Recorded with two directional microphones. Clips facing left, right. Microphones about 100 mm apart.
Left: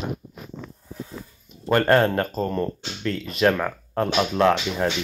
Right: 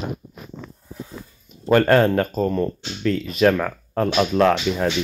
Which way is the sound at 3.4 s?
5° left (ahead or behind).